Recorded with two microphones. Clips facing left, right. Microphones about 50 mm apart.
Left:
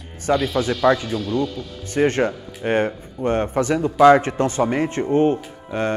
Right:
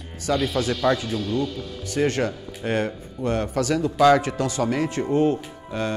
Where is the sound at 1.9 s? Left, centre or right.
Left.